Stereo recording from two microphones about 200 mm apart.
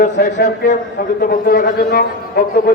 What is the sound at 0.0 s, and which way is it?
A man's voice, 40° left (ahead or behind).